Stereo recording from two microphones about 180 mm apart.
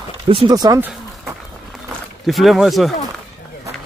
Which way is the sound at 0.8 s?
Centre (ahead or behind).